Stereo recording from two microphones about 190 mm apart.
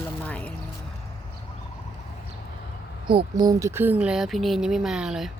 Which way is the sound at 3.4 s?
15° right (ahead or behind).